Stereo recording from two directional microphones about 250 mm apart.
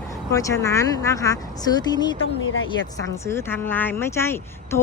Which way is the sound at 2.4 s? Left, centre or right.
Left.